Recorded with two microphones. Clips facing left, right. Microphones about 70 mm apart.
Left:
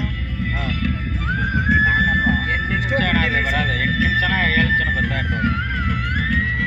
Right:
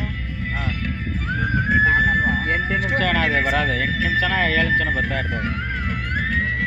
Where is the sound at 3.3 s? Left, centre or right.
Right.